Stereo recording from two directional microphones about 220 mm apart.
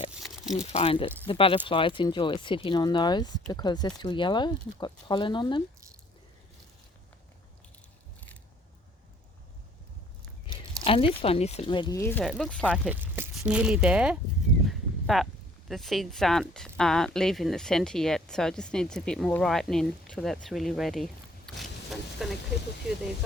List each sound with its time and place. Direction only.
0.1 s a sound: centre (ahead or behind)
0.7 s speech: 25° left (ahead or behind)
10.4 s speech: 25° left (ahead or behind)
12.2 s speech: centre (ahead or behind)
14.7 s a sound: centre (ahead or behind)
15.7 s speech: centre (ahead or behind)